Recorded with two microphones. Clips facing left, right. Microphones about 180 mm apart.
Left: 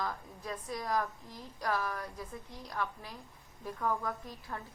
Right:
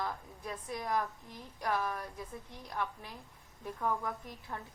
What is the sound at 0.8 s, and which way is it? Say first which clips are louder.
A woman's voice: even; 25° right (ahead or behind).